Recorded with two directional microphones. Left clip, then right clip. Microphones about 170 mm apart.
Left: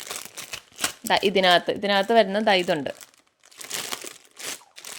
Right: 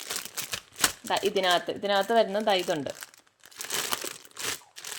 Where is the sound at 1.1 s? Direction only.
45° left (ahead or behind).